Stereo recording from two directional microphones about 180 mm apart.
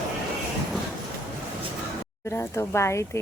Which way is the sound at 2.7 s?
15° left (ahead or behind).